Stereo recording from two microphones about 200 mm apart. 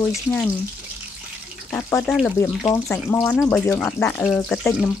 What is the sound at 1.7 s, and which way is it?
Speech, 15° left (ahead or behind).